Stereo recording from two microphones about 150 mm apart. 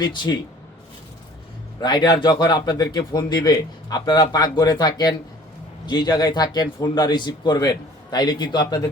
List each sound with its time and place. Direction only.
0.0 s speech: 25° left (ahead or behind)
1.8 s speech: 30° left (ahead or behind)